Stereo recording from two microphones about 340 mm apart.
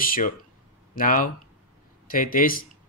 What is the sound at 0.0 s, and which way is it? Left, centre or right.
Speech, left.